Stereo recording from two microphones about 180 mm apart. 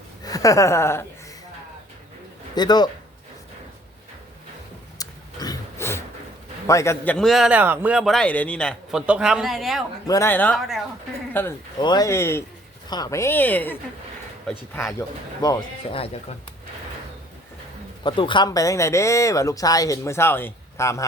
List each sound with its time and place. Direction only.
0.3 s speech: 20° left (ahead or behind)
2.6 s speech: 25° left (ahead or behind)
4.9 s roaring cats: 20° left (ahead or behind)
6.7 s a man's voice: 15° left (ahead or behind); by 9.8 s centre (ahead or behind)
10.1 s speech: 15° left (ahead or behind)
11.8 s a man's voice: 25° left (ahead or behind); by 14.9 s 5° left (ahead or behind)
14.9 s speech: 20° left (ahead or behind)
18.0 s speech: 25° left (ahead or behind)